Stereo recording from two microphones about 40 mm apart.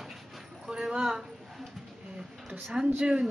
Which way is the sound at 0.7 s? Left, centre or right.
Centre.